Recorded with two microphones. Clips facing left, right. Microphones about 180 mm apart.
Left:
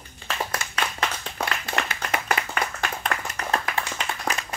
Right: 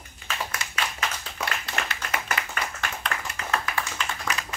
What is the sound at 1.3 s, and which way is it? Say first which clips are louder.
Clapping: left 3 dB; 50° left (ahead or behind).